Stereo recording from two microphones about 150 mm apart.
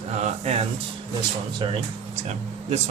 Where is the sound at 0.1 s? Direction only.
50° right (ahead or behind).